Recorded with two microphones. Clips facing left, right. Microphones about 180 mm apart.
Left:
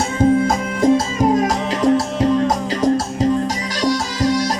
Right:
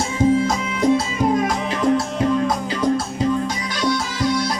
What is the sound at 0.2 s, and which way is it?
Music, 50° left (ahead or behind).